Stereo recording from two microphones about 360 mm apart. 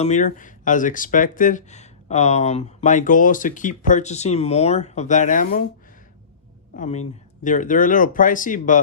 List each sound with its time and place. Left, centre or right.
0.0 s speech: centre
6.7 s speech: centre